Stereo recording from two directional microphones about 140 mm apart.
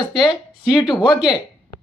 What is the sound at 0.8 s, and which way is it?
Speech, 30° left (ahead or behind).